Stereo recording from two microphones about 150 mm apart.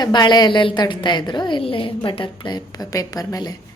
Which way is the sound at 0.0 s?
30° left (ahead or behind).